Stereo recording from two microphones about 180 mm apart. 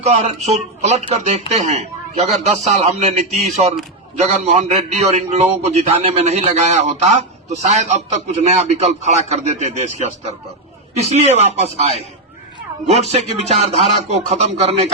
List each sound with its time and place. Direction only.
0.0 s a man's voice: 40° right (ahead or behind)